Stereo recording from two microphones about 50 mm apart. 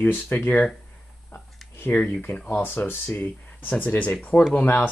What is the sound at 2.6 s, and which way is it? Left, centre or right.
Speech, left.